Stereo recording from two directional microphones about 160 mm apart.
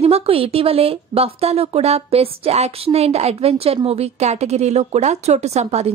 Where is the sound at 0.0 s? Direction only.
40° right (ahead or behind).